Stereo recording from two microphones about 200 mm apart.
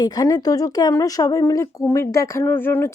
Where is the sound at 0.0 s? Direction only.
20° left (ahead or behind).